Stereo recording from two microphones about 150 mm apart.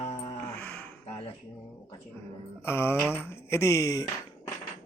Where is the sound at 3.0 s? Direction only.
15° left (ahead or behind).